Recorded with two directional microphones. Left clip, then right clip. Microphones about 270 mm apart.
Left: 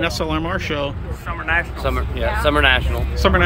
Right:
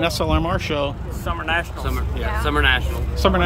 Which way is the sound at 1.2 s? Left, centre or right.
Right.